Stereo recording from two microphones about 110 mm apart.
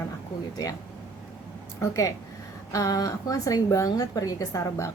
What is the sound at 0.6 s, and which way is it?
Speech, 30° left (ahead or behind).